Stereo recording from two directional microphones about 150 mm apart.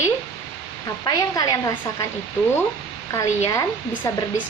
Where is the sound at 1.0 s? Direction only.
25° left (ahead or behind).